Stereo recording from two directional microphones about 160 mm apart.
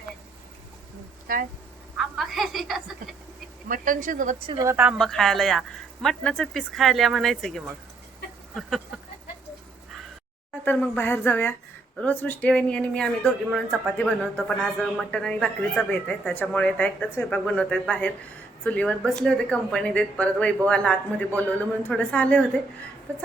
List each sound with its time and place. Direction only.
2.0 s a woman's voice: centre (ahead or behind)
3.7 s speech: 60° right (ahead or behind)
4.6 s a woman's voice: 15° right (ahead or behind)
4.9 s speech: centre (ahead or behind)
10.7 s speech: 10° left (ahead or behind)